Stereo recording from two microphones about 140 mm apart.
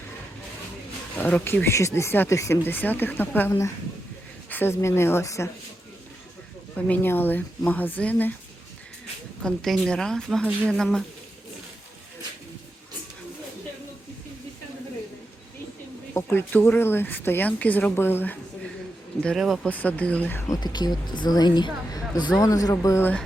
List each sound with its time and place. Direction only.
1.2 s speech: 15° left (ahead or behind)
6.7 s speech: 10° left (ahead or behind)
9.4 s a woman's voice: 5° left (ahead or behind)
16.1 s speech: 15° left (ahead or behind)
19.2 s a woman's voice: centre (ahead or behind)
20.5 s speech: 30° left (ahead or behind)